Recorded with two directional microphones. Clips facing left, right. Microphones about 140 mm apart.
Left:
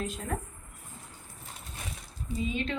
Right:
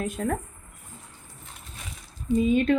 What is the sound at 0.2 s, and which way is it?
Speech, 60° right (ahead or behind).